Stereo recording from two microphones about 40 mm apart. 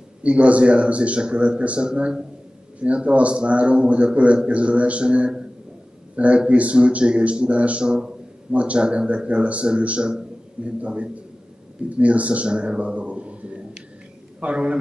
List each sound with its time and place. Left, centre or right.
0.2 s a man's voice: right
7.8 s a man's voice: right
8.5 s a man's voice: right